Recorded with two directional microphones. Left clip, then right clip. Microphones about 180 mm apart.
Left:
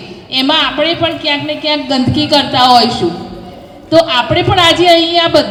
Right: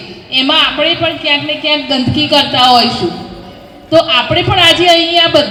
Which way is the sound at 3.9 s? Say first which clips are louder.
Even; 35° right (ahead or behind).